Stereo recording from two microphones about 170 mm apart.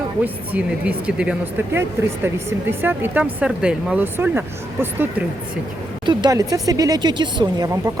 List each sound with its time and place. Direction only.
0.5 s speech: 5° right (ahead or behind)
6.1 s speech: 25° right (ahead or behind)